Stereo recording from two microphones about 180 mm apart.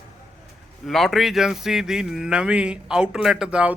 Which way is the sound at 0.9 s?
Centre (ahead or behind).